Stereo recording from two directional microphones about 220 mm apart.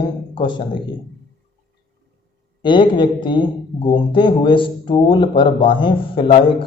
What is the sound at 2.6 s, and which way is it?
Speech, 20° left (ahead or behind).